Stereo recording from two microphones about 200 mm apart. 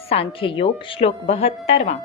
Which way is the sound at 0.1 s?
30° left (ahead or behind).